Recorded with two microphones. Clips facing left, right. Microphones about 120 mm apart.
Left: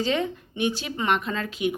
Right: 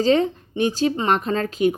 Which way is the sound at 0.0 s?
35° right (ahead or behind).